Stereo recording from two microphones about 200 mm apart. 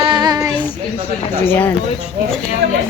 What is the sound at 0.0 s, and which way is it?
Child singing, 20° right (ahead or behind).